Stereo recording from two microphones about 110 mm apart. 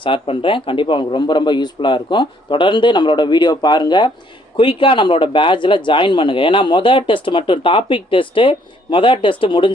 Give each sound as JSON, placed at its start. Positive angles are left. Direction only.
{"t": 0.0, "sound": "speech", "side_deg": 50}